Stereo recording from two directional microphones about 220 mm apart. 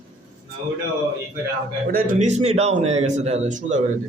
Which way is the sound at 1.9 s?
35° right (ahead or behind).